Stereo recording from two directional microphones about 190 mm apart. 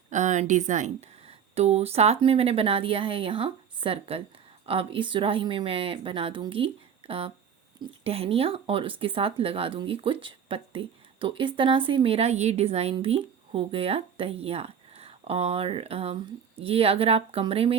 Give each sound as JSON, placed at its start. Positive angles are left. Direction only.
{"t": 0.1, "sound": "speech", "side_deg": -40}